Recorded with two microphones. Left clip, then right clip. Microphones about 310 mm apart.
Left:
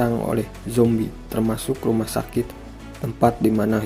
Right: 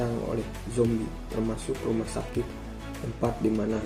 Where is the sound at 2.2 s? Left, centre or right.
Left.